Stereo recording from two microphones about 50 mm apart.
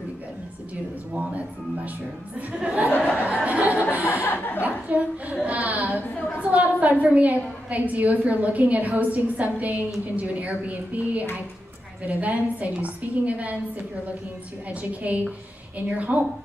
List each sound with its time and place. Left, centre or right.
2.6 s a woman's voice: right
3.2 s a sound: right
4.0 s chuckle: left
4.6 s a woman's voice: right
14.7 s a woman's voice: right